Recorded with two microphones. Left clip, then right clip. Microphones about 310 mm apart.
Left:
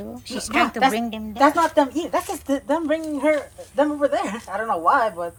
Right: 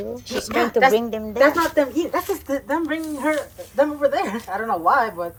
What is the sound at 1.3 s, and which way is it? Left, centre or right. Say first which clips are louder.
Speech: even; left.